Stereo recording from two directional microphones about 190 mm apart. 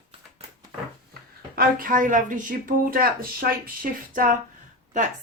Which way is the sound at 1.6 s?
45° right (ahead or behind).